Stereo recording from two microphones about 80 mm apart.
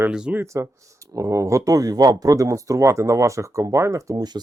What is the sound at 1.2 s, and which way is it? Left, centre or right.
Speech, right.